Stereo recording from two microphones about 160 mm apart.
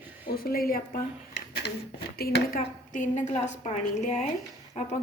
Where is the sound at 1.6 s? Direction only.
90° left.